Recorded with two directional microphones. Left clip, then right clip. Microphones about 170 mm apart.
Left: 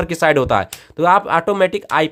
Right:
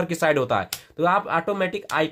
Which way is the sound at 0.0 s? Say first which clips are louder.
Left 6 dB; 30° left (ahead or behind).